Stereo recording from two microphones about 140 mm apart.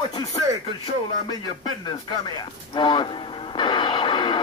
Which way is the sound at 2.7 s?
35° left (ahead or behind).